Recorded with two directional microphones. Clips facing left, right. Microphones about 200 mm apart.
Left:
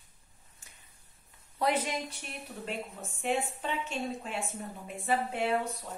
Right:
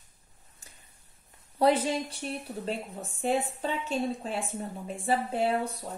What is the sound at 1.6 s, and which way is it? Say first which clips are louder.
A woman's voice: right 6 dB; 30° right (ahead or behind).